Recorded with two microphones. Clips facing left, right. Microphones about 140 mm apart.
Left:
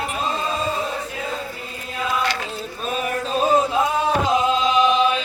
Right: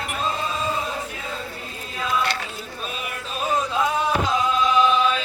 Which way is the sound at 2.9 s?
30° left (ahead or behind).